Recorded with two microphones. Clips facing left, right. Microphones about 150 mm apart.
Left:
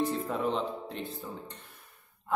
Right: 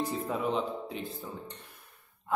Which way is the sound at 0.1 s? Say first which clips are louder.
Even; 5° right (ahead or behind).